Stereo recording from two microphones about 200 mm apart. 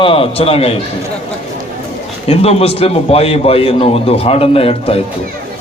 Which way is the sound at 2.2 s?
30° left (ahead or behind).